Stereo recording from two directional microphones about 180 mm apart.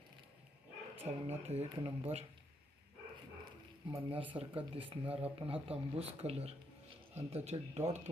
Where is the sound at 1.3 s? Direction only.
35° right (ahead or behind).